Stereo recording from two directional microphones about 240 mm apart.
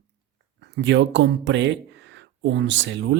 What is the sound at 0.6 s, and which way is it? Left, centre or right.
Speech, right.